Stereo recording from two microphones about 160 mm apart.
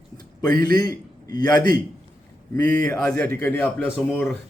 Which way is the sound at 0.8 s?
25° left (ahead or behind).